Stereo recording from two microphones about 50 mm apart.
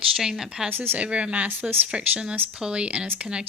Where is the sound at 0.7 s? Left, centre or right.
Right.